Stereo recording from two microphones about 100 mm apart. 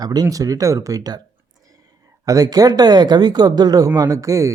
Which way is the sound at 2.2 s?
35° right (ahead or behind).